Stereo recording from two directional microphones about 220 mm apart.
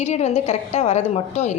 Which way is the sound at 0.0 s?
30° left (ahead or behind).